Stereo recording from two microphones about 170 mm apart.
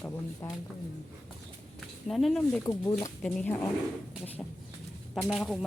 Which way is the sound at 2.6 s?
20° left (ahead or behind).